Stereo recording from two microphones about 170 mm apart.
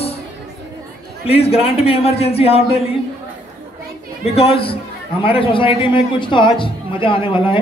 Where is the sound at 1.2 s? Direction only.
35° left (ahead or behind).